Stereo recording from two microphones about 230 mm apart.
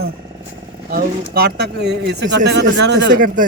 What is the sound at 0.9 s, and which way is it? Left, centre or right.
Speech, right.